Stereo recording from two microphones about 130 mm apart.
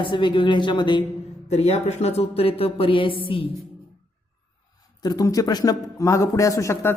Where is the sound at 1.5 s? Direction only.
55° left (ahead or behind).